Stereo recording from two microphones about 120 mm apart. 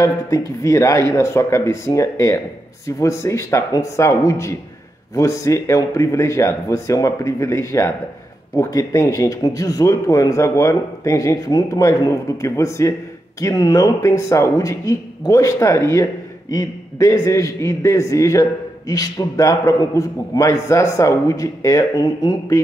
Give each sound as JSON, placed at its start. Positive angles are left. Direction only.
{"t": 0.0, "sound": "speech", "side_deg": 25}